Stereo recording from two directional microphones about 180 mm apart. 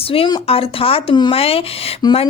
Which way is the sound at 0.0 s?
30° left (ahead or behind).